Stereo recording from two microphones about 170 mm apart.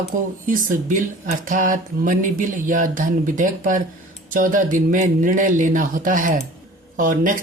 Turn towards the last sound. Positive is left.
turn(degrees=-50)  # may be behind; listen again after turning